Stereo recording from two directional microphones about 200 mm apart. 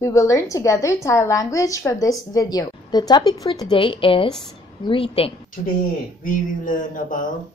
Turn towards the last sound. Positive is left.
turn(degrees=40)  # may be behind; listen again after turning